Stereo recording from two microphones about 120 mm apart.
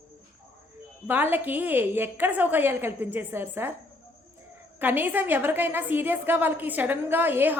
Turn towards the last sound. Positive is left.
turn(degrees=-15)  # may be behind; listen again after turning